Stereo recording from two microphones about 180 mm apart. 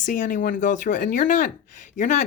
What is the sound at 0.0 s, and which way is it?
Speech, 45° left (ahead or behind).